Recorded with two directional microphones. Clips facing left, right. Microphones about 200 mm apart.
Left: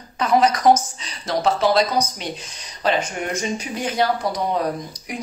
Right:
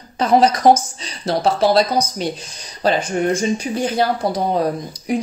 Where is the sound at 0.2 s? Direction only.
30° right (ahead or behind).